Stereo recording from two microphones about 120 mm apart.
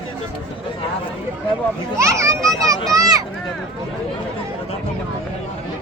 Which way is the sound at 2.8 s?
30° right (ahead or behind).